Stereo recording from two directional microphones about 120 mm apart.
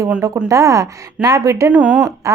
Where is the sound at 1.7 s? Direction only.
10° right (ahead or behind).